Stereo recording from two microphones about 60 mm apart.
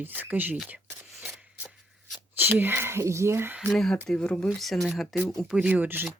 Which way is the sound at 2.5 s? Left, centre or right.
Right.